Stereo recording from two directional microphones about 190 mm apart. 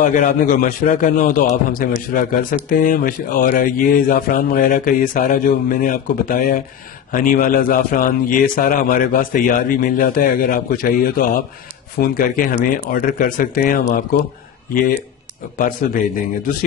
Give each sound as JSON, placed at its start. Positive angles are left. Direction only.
{"t": 0.0, "sound": "a man's voice", "side_deg": 40}
{"t": 15.5, "sound": "a man's voice", "side_deg": 45}